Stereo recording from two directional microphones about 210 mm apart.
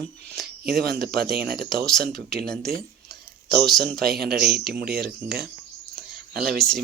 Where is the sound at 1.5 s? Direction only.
Centre (ahead or behind).